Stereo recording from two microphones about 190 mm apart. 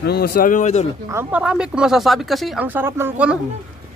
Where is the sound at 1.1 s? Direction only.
10° right (ahead or behind).